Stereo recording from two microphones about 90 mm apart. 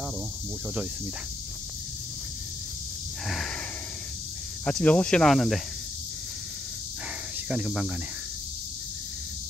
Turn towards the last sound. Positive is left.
turn(degrees=-10)  # may be behind; listen again after turning